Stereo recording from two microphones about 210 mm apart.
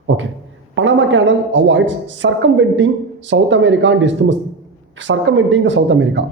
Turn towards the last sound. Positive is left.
turn(degrees=-60)  # may be behind; listen again after turning